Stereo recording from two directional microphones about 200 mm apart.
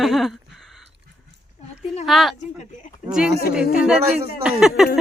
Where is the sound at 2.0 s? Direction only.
Centre (ahead or behind).